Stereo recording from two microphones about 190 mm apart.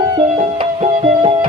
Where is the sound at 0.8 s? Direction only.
35° right (ahead or behind).